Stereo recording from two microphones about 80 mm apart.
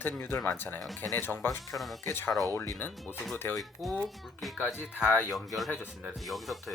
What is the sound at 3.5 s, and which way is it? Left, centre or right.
Speech, centre.